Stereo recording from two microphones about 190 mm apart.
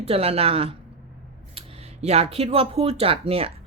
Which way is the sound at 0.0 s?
30° right (ahead or behind).